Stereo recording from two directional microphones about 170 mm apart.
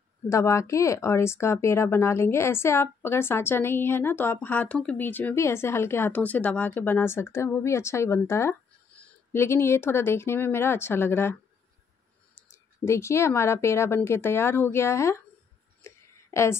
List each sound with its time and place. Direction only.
0.3 s speech: 15° left (ahead or behind)
12.4 s speech: 15° left (ahead or behind)
15.8 s a sound: 15° left (ahead or behind)
16.3 s a woman's voice: 15° left (ahead or behind)